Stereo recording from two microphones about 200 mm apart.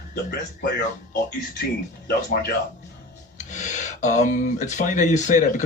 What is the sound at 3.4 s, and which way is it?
Speech, 40° left (ahead or behind).